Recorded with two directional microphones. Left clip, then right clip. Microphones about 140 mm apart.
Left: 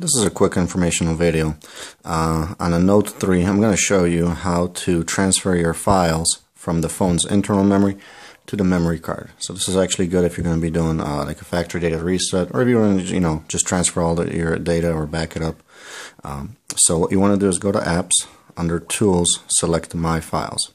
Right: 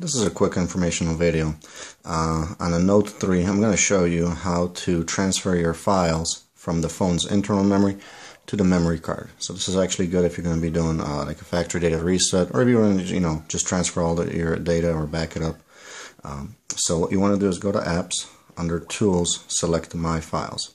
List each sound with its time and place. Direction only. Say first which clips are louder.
0.0 s speech: left 4 dB; 35° left (ahead or behind); by 9.6 s 20° left (ahead or behind)
9.7 s speech: left 4 dB; 30° left (ahead or behind)
11.6 s speech: right 1 dB; 15° left (ahead or behind)